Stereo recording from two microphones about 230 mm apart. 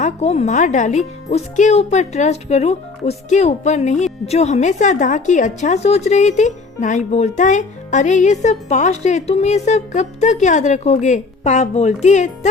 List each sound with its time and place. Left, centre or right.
0.0 s speech: left